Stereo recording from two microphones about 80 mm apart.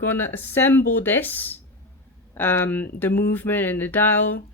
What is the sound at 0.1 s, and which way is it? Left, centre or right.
Speech, left.